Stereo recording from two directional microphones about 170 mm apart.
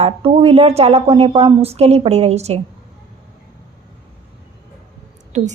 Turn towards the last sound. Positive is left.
turn(degrees=-40)  # may be behind; listen again after turning